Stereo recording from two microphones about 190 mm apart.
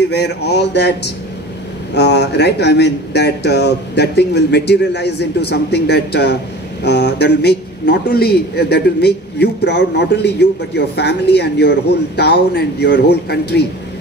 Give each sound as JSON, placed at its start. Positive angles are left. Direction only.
{"t": 0.1, "sound": "a man's voice", "side_deg": 60}